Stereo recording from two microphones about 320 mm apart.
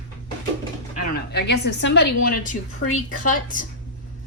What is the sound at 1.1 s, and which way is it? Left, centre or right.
A woman's voice, left.